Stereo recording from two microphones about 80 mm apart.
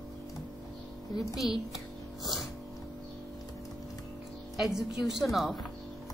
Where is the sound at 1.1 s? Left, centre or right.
Centre.